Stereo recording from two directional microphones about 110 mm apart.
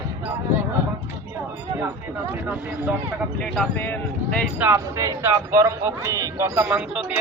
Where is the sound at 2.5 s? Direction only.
15° right (ahead or behind).